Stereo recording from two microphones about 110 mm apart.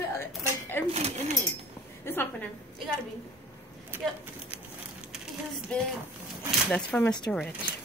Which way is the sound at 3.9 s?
20° right (ahead or behind).